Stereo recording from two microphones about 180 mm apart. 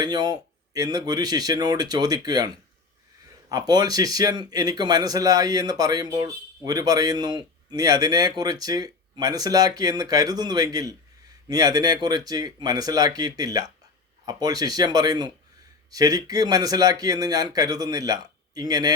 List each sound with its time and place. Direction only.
0.0 s a man's voice: 25° right (ahead or behind)
3.5 s a man's voice: 20° right (ahead or behind)